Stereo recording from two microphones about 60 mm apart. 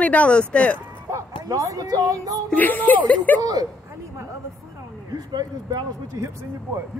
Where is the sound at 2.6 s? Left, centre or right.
Left.